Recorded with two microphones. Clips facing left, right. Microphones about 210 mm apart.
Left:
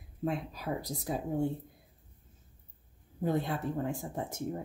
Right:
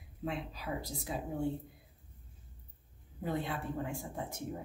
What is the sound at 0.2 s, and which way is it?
A woman's voice, 45° left (ahead or behind).